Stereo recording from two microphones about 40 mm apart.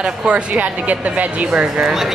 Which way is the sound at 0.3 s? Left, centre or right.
Right.